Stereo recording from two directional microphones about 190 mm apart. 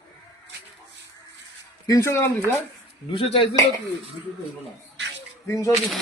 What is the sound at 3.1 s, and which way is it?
Speech, 30° left (ahead or behind).